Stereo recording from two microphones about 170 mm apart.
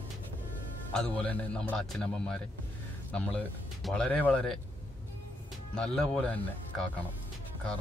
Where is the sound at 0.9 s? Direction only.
5° left (ahead or behind).